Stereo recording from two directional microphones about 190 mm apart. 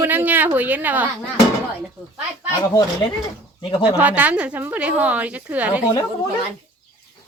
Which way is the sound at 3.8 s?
10° right (ahead or behind).